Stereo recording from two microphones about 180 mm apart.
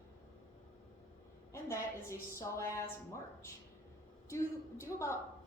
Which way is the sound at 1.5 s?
15° left (ahead or behind).